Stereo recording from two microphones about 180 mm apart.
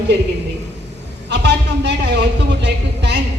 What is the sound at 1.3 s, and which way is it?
A man's voice, 70° right (ahead or behind).